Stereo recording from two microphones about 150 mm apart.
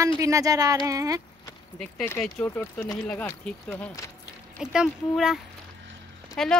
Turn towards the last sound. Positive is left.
turn(degrees=5)  # may be behind; listen again after turning